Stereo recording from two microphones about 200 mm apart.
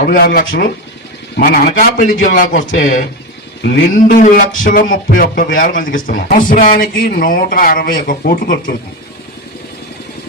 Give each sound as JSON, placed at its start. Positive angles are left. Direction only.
{"t": 0.0, "sound": "a man's voice", "side_deg": 45}
{"t": 3.6, "sound": "a man's voice", "side_deg": 55}